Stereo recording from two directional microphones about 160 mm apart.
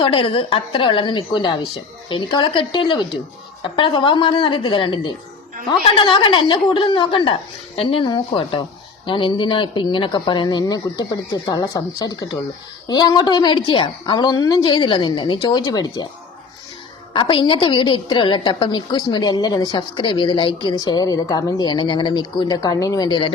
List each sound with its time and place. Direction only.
0.0 s a woman's voice: 30° left (ahead or behind)
17.2 s a woman's voice: 30° left (ahead or behind)